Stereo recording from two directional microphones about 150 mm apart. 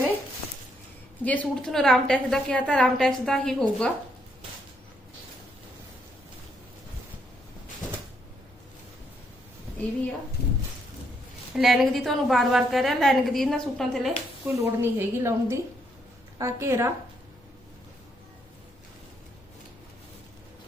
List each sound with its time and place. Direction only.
1.2 s a woman's voice: 10° left (ahead or behind)
11.5 s a woman's voice: centre (ahead or behind)
14.4 s a woman's voice: 15° right (ahead or behind)